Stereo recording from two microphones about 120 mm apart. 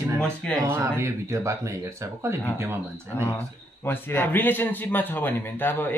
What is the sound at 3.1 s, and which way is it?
A man's voice, 20° left (ahead or behind).